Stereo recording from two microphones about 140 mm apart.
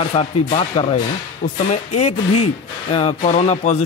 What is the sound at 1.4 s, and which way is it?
A man's voice, 55° left (ahead or behind).